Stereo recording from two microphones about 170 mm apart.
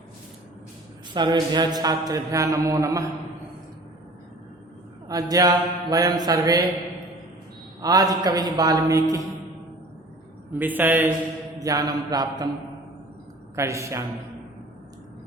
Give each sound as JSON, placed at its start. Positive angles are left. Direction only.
{"t": 1.1, "sound": "mantra", "side_deg": -25}
{"t": 5.0, "sound": "mantra", "side_deg": -20}
{"t": 7.8, "sound": "mantra", "side_deg": -20}
{"t": 10.5, "sound": "a man's voice", "side_deg": -10}
{"t": 11.6, "sound": "mantra", "side_deg": -20}
{"t": 13.6, "sound": "a man's voice", "side_deg": -15}